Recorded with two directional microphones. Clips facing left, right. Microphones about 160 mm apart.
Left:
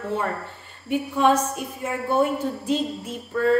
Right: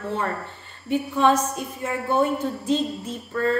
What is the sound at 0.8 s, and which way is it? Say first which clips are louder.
A woman's voice: even; 10° left (ahead or behind).